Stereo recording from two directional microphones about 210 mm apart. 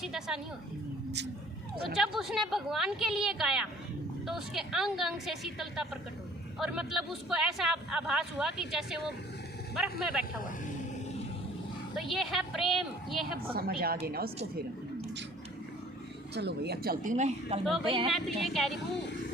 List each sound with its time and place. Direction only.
0.0 s speech: centre (ahead or behind)
1.9 s speech: centre (ahead or behind)
11.9 s speech: centre (ahead or behind)
13.6 s speech: 45° right (ahead or behind)
16.3 s speech: 50° right (ahead or behind); by 18.1 s 25° right (ahead or behind)
18.1 s speech: centre (ahead or behind)